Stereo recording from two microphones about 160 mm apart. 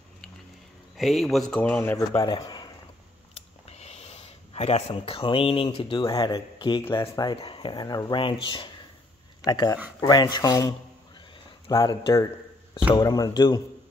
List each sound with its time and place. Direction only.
0.9 s speech: centre (ahead or behind)
2.2 s speech: 25° left (ahead or behind)
3.3 s speech: 40° left (ahead or behind); by 10.7 s 20° left (ahead or behind)
11.7 s speech: 25° left (ahead or behind)